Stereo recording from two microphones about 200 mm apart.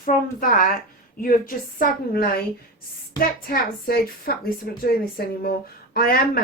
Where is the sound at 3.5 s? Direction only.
50° left (ahead or behind).